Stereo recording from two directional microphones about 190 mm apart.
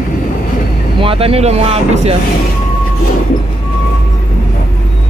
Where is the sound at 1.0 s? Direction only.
30° right (ahead or behind).